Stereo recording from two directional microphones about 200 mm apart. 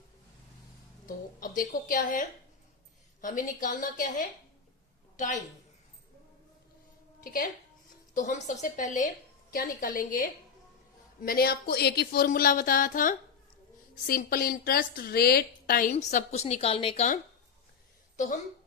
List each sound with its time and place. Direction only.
1.0 s a woman's voice: 45° left (ahead or behind)
5.1 s a woman's voice: 40° left (ahead or behind)
7.2 s a woman's voice: 45° left (ahead or behind)
14.3 s speech: 50° left (ahead or behind)
15.9 s a woman's voice: 35° left (ahead or behind)